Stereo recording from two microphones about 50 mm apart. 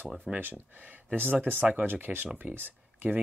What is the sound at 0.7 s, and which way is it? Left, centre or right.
Speech, right.